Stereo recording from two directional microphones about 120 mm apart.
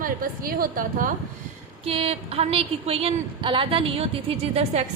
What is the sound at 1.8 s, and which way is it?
A woman's voice, 55° right (ahead or behind).